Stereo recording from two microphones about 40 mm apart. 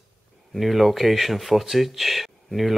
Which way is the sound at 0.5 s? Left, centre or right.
Centre.